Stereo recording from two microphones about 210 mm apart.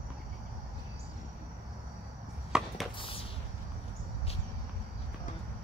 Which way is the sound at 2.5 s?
Centre (ahead or behind).